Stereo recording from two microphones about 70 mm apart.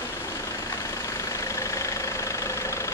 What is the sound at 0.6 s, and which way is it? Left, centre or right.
Vehicle, left.